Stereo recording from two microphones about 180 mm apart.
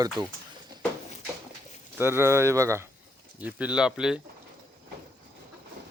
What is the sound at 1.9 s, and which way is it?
Speech, 10° right (ahead or behind).